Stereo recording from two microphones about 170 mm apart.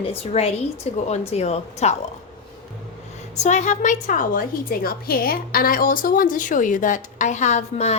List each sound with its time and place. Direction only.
0.0 s a woman's voice: 35° left (ahead or behind)
3.4 s a woman's voice: 45° left (ahead or behind)